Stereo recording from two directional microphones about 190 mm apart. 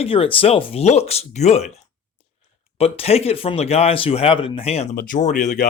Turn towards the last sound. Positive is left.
turn(degrees=40)  # may be behind; listen again after turning